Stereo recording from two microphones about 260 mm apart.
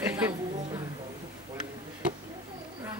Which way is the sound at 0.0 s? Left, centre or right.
Centre.